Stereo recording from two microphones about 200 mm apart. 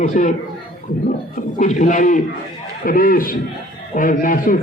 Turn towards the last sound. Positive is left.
turn(degrees=45)  # may be behind; listen again after turning